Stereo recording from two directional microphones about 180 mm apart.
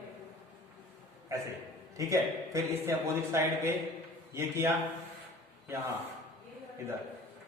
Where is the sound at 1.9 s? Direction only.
15° right (ahead or behind).